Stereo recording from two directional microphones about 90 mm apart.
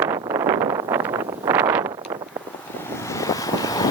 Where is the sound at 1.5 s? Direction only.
25° right (ahead or behind).